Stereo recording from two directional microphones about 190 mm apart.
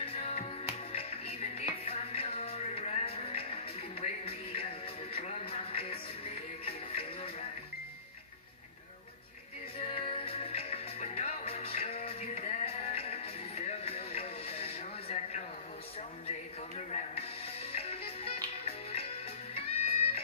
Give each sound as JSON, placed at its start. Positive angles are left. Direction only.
{"t": 0.0, "sound": "music", "side_deg": 30}
{"t": 9.8, "sound": "music", "side_deg": 30}
{"t": 16.7, "sound": "music", "side_deg": 35}